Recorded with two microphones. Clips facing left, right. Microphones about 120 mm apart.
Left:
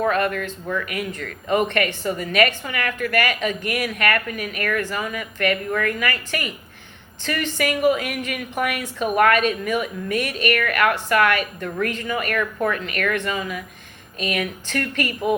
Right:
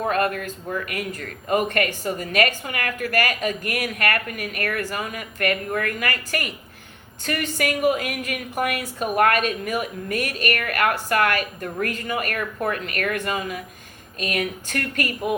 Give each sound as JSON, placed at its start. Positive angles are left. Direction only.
{"t": 0.1, "sound": "a woman's voice", "side_deg": -40}